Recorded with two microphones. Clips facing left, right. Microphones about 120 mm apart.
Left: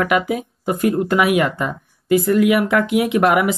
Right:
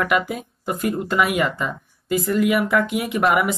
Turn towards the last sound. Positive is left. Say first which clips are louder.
# left 4 dB
turn(degrees=0)  # may be behind; listen again after turning